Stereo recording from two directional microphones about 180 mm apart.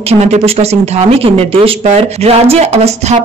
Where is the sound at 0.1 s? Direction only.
35° right (ahead or behind).